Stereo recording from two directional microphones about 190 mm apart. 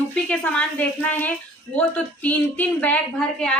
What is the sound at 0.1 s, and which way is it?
A woman's voice, 5° left (ahead or behind).